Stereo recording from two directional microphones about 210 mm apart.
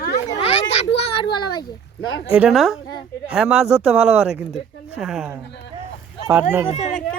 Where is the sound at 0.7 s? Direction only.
30° left (ahead or behind).